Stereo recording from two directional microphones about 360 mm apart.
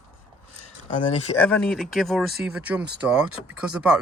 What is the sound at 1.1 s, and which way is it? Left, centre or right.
Speech, centre.